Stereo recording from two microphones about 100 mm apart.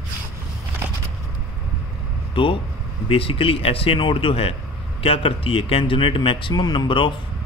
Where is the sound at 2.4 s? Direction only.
60° left (ahead or behind).